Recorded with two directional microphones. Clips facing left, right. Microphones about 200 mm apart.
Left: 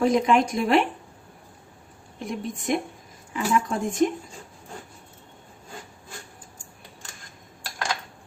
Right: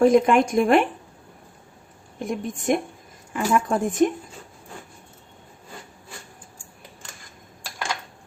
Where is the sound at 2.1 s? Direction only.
50° right (ahead or behind).